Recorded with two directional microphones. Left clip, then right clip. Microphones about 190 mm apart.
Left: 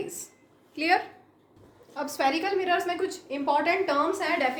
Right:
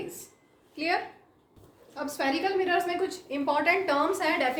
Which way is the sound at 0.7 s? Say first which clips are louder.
Left 4 dB; 40° left (ahead or behind).